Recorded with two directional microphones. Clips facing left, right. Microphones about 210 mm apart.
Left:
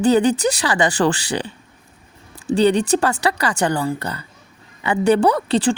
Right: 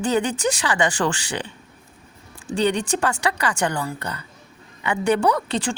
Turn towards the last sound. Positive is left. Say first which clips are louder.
# left 5 dB
turn(degrees=35)  # may be behind; listen again after turning